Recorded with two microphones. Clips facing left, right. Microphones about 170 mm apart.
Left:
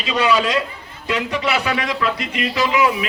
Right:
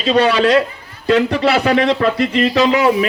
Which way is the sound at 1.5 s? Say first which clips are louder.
Right 8 dB; 35° right (ahead or behind).